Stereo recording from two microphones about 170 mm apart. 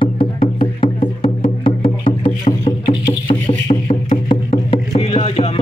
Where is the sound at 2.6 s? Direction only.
30° left (ahead or behind).